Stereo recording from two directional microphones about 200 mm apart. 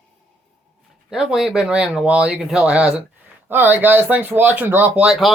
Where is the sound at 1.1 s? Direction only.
Centre (ahead or behind).